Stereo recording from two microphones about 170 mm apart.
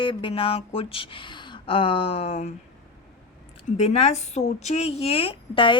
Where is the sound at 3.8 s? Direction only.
40° left (ahead or behind).